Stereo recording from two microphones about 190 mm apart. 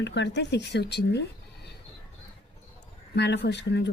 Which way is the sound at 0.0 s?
65° left (ahead or behind).